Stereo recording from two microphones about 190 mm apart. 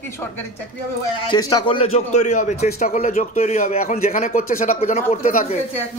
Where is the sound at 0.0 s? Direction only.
10° left (ahead or behind); by 5.6 s 45° left (ahead or behind).